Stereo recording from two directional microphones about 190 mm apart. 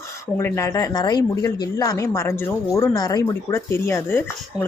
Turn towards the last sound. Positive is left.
turn(degrees=10)  # may be behind; listen again after turning